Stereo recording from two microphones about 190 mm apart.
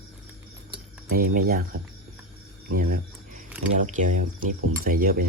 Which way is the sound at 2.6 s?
50° right (ahead or behind).